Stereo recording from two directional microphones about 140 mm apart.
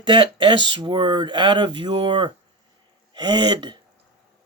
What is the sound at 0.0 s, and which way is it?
Speech, 35° right (ahead or behind).